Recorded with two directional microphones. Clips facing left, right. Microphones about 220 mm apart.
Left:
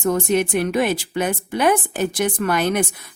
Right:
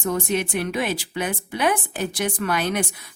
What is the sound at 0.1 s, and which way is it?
Speech, 45° left (ahead or behind).